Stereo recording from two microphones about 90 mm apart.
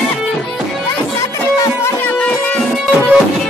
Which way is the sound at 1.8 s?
15° left (ahead or behind).